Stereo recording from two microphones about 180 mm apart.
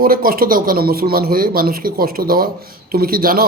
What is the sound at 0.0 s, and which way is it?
Speech, 55° right (ahead or behind).